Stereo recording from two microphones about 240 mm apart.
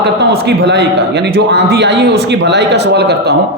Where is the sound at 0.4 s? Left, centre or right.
Right.